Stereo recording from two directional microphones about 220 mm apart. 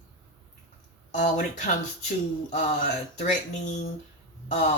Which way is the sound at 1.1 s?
35° left (ahead or behind).